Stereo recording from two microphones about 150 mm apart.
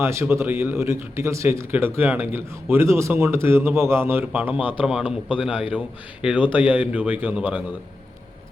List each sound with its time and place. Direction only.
0.0 s a man's voice: 15° right (ahead or behind)